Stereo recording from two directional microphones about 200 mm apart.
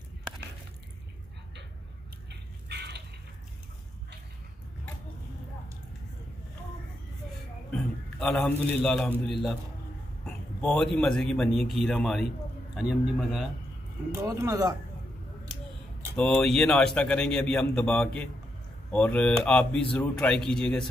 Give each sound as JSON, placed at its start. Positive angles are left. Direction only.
{"t": 2.2, "sound": "a sound", "side_deg": -55}
{"t": 7.7, "sound": "a man's voice", "side_deg": 5}
{"t": 14.1, "sound": "speech", "side_deg": -15}
{"t": 16.2, "sound": "a man's voice", "side_deg": 5}